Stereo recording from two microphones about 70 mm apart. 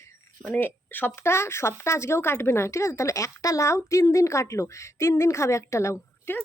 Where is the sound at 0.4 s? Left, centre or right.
Left.